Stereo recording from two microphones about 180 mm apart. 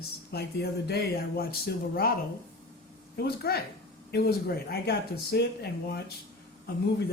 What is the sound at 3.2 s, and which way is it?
Speech, 60° left (ahead or behind).